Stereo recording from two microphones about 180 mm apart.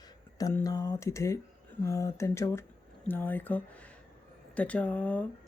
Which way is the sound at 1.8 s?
15° left (ahead or behind).